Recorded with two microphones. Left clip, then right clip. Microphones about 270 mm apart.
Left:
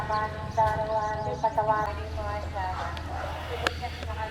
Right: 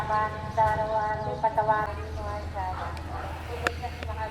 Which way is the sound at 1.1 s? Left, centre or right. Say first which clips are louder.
Right 1 dB; right.